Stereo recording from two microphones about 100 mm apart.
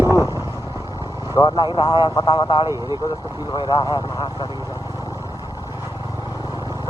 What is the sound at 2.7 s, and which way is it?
Speech, 40° right (ahead or behind).